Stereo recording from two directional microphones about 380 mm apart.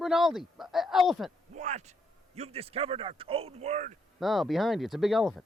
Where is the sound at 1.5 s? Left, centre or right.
Centre.